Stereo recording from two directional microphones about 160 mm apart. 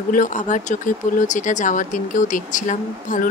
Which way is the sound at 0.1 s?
55° left (ahead or behind).